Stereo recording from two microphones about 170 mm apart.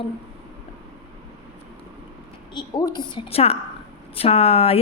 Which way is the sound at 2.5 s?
25° left (ahead or behind).